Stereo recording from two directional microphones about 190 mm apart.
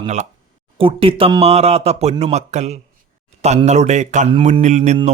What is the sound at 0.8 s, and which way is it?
A man's voice, 30° right (ahead or behind).